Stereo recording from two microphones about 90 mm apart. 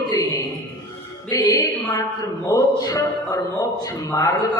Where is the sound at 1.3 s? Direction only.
50° left (ahead or behind).